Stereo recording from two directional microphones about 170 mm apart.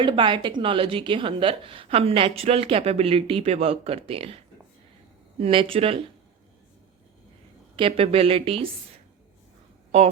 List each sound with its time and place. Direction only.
0.0 s a woman's voice: 30° right (ahead or behind)
5.4 s a woman's voice: 30° right (ahead or behind)
7.8 s a woman's voice: 35° right (ahead or behind)